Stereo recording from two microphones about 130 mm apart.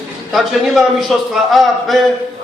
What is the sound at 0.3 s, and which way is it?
A man's voice, centre (ahead or behind).